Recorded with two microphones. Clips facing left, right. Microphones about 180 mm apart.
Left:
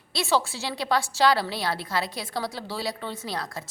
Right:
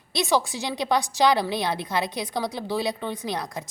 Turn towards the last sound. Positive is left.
turn(degrees=-20)  # may be behind; listen again after turning